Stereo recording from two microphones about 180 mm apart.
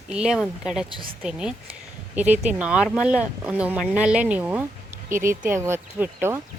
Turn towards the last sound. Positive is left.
turn(degrees=-10)  # may be behind; listen again after turning